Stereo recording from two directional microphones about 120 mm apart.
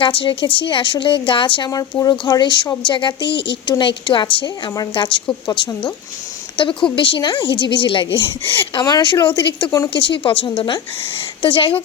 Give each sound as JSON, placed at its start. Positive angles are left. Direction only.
{"t": 0.0, "sound": "speech", "side_deg": 45}
{"t": 1.7, "sound": "speech", "side_deg": 30}